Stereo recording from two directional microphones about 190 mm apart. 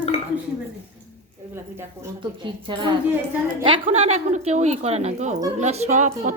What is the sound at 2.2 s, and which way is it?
A woman's voice, 25° right (ahead or behind).